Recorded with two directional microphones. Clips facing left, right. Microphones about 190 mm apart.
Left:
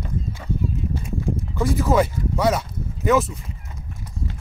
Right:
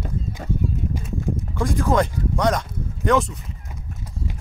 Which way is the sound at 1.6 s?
5° left (ahead or behind).